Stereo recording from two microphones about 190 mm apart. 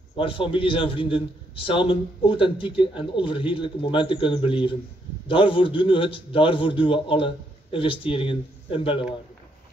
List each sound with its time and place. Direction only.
0.1 s a man's voice: 25° left (ahead or behind)